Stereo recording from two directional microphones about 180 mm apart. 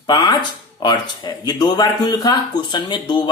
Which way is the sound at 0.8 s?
25° left (ahead or behind).